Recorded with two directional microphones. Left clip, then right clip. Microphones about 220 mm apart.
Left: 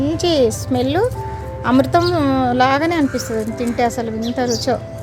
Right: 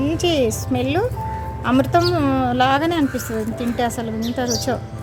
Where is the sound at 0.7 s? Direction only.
30° left (ahead or behind).